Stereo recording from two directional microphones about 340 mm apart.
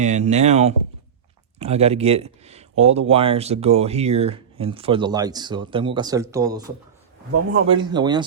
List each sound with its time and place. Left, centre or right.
0.0 s speech: centre
7.7 s speech: centre